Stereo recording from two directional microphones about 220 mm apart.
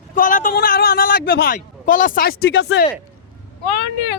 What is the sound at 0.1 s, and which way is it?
A man's voice, 40° left (ahead or behind).